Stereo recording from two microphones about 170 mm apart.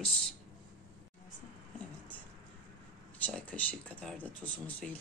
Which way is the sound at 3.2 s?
10° left (ahead or behind).